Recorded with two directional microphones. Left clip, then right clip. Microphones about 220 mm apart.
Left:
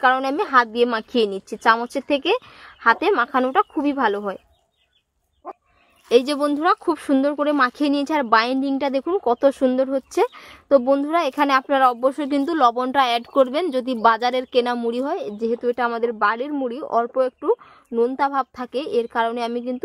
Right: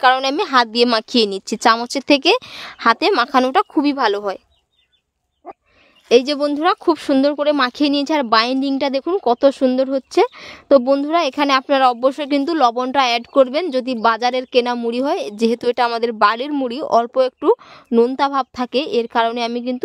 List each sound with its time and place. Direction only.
0.0 s a woman's voice: 45° right (ahead or behind)
6.0 s speech: 25° right (ahead or behind)
15.1 s a woman's voice: 40° right (ahead or behind)